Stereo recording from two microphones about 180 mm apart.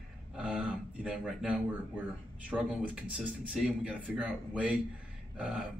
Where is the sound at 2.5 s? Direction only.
5° right (ahead or behind).